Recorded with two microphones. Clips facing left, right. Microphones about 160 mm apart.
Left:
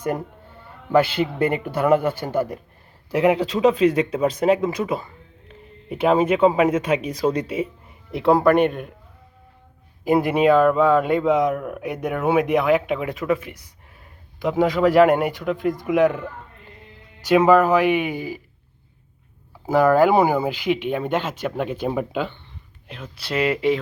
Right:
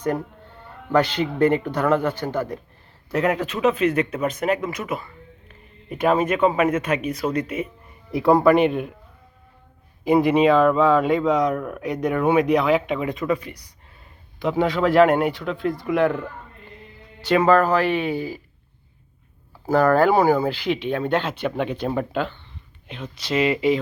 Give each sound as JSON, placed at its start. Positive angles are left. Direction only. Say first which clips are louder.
{"t": 0.9, "sound": "speech", "louder": "left 2 dB", "side_deg": 5}
{"t": 4.4, "sound": "speech", "louder": "left 5 dB", "side_deg": 25}
{"t": 6.1, "sound": "speech", "louder": "left 2 dB", "side_deg": 15}
{"t": 7.1, "sound": "speech", "louder": "left 2 dB", "side_deg": 30}
{"t": 8.1, "sound": "speech", "louder": "even", "side_deg": 0}
{"t": 10.0, "sound": "speech", "louder": "right 1 dB", "side_deg": 5}
{"t": 14.4, "sound": "speech", "louder": "left 2 dB", "side_deg": 5}
{"t": 17.2, "sound": "speech", "louder": "left 2 dB", "side_deg": 10}
{"t": 19.6, "sound": "speech", "louder": "left 1 dB", "side_deg": 10}